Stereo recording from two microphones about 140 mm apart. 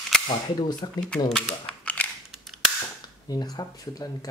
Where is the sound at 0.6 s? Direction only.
30° left (ahead or behind).